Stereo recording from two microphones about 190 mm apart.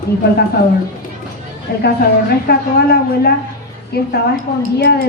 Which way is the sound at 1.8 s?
55° left (ahead or behind).